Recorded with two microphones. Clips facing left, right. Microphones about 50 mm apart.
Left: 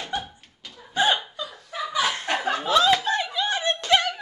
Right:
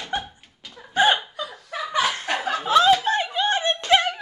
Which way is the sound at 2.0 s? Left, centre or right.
Centre.